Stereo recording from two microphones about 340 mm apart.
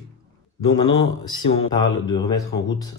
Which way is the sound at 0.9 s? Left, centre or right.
Left.